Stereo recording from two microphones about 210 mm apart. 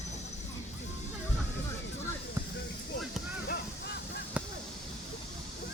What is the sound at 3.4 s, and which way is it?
Honk, 50° left (ahead or behind).